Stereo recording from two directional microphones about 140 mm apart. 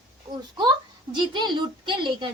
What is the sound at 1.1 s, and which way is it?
A woman's voice, 35° right (ahead or behind).